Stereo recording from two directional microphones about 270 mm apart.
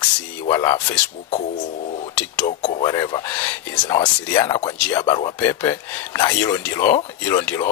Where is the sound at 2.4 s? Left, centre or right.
Left.